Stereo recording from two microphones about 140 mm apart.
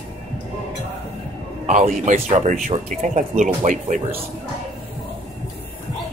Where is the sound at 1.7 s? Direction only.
60° right (ahead or behind).